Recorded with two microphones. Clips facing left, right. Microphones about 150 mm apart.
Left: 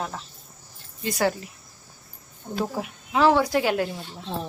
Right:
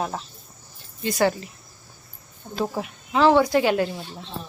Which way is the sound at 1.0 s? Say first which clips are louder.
Right 3 dB; centre (ahead or behind).